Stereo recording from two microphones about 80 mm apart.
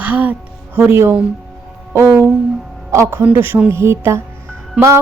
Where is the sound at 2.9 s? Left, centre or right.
Right.